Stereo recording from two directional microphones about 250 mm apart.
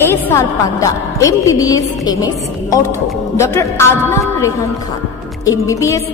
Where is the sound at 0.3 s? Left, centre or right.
Centre.